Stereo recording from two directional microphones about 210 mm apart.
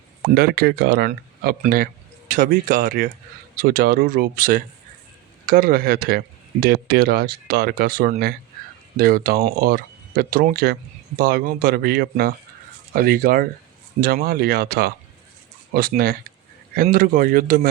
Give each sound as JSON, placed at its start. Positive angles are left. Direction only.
{"t": 0.3, "sound": "speech", "side_deg": -50}